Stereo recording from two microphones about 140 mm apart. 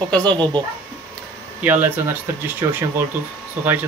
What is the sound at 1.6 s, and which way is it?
Speech, 15° right (ahead or behind).